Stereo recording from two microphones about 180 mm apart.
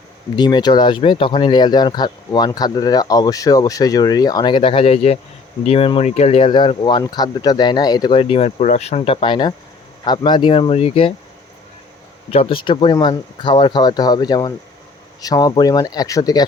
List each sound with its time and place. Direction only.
0.3 s speech: 25° left (ahead or behind)
12.3 s speech: 30° left (ahead or behind)